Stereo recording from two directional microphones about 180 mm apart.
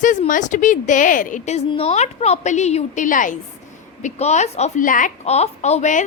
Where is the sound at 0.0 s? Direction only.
45° left (ahead or behind).